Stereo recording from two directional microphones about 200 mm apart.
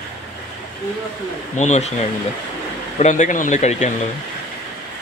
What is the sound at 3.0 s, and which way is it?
Speech, 35° left (ahead or behind).